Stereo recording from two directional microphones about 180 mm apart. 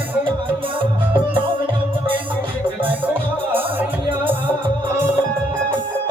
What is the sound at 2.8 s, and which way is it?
Music, 10° right (ahead or behind).